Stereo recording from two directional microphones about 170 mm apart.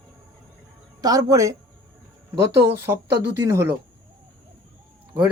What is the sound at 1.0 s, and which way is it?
Speech, 20° right (ahead or behind).